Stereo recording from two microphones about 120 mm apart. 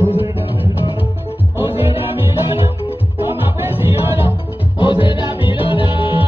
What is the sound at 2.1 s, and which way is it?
Music, 50° left (ahead or behind).